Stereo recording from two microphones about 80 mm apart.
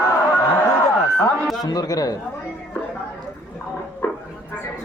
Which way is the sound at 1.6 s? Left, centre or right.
Left.